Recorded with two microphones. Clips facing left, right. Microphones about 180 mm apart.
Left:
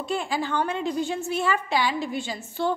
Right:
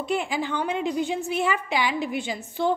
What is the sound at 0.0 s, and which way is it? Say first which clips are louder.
A woman's voice: right 1 dB; 15° right (ahead or behind).